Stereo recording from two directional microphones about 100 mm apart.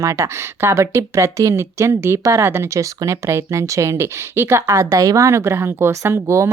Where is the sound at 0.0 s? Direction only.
30° right (ahead or behind).